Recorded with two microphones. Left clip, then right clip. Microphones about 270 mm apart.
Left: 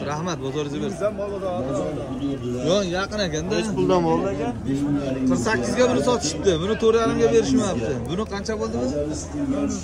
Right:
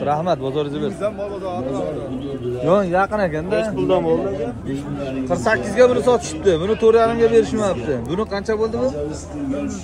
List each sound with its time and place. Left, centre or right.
3.7 s speech: left
5.2 s a man's voice: centre